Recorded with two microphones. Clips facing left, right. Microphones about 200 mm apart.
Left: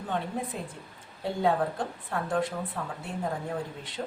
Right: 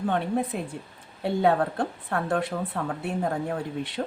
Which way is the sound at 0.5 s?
65° right (ahead or behind).